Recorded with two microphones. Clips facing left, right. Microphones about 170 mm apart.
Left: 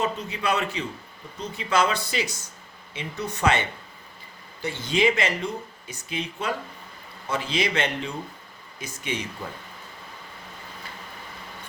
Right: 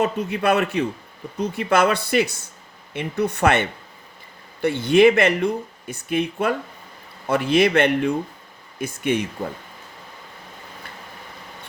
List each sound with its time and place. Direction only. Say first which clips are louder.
0.0 s speech: right 6 dB; 55° right (ahead or behind)